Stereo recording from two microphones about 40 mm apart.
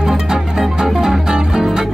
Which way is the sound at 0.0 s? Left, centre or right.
Centre.